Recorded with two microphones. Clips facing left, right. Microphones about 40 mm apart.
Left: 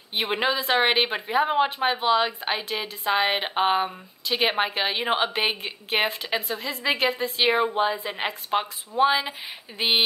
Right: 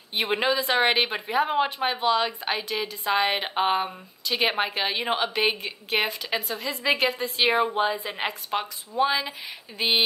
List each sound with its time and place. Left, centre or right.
0.3 s a woman's voice: centre
8.5 s a woman's voice: left